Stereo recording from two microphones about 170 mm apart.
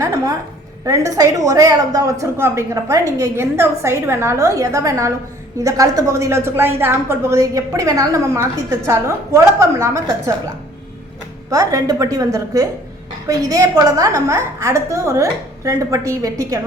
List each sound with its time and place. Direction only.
0.0 s a woman's voice: 20° right (ahead or behind)
11.5 s a woman's voice: 20° right (ahead or behind)